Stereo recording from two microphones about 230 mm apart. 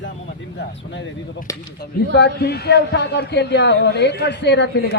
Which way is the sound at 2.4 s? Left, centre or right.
Left.